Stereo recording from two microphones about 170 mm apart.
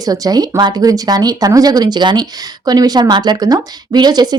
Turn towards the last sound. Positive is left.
turn(degrees=-25)  # may be behind; listen again after turning